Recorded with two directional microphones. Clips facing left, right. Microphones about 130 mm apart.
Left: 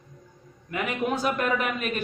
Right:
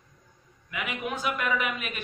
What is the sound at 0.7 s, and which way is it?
A man's voice, 40° left (ahead or behind).